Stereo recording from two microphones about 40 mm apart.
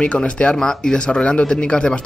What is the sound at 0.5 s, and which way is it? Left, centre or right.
Speech, centre.